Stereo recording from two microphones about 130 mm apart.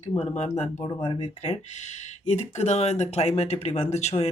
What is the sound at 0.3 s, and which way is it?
Speech, 60° left (ahead or behind).